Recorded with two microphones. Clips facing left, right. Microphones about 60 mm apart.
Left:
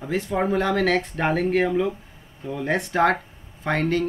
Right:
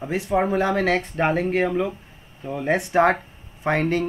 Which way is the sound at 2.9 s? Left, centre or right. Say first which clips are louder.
Right 2 dB; centre.